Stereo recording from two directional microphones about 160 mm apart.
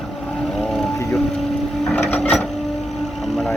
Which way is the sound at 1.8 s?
10° left (ahead or behind).